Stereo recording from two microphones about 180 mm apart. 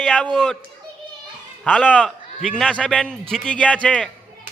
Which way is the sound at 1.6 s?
5° left (ahead or behind).